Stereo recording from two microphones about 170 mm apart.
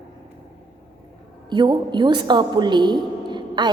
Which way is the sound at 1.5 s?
25° right (ahead or behind).